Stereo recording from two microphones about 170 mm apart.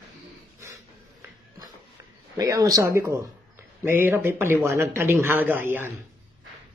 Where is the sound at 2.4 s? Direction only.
20° right (ahead or behind).